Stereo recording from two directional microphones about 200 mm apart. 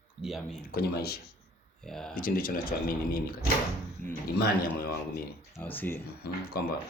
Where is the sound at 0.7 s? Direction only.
50° left (ahead or behind).